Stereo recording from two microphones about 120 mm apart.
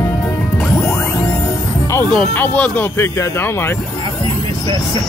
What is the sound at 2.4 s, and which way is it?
Speech, 15° left (ahead or behind).